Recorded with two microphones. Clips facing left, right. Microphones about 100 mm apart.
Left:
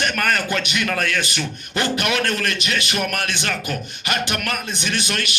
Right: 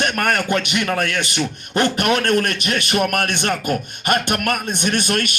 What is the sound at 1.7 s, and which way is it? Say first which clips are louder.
Speech: right 4 dB; 45° right (ahead or behind).